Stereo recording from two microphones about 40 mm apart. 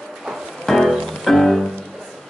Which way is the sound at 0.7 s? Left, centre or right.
Centre.